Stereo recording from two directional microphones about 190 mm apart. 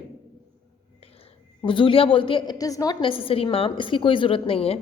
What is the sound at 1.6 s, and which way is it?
A woman's voice, 25° left (ahead or behind).